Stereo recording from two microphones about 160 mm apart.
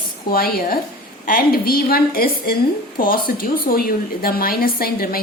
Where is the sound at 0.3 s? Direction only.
70° left (ahead or behind).